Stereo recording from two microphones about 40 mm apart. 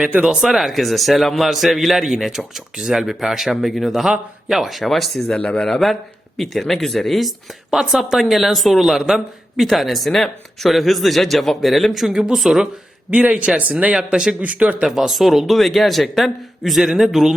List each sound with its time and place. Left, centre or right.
0.4 s speech: centre
5.4 s a man's voice: left
5.6 s speech: centre
12.0 s speech: centre
13.1 s speech: right
13.9 s speech: centre
14.4 s speech: right
14.8 s speech: centre